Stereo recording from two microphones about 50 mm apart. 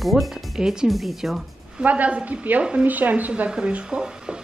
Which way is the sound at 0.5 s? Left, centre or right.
Centre.